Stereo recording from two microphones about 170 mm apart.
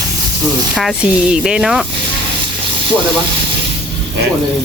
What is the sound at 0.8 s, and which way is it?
Speech, centre (ahead or behind).